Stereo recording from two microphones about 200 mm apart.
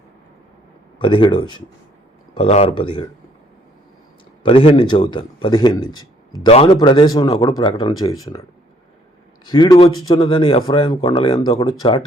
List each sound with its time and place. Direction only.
0.9 s speech: 25° left (ahead or behind)
4.4 s speech: 30° left (ahead or behind)
9.5 s speech: 20° left (ahead or behind)